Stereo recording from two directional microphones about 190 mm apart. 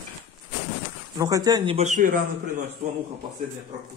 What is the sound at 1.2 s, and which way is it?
Speech, 20° right (ahead or behind).